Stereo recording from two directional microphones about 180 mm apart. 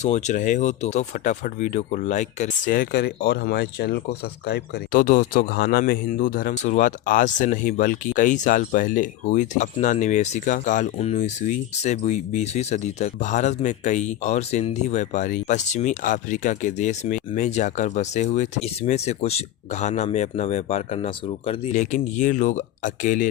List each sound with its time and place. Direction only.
0.0 s speech: 40° left (ahead or behind)